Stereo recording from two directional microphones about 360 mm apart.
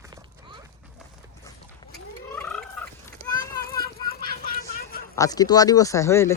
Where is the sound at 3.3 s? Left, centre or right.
Centre.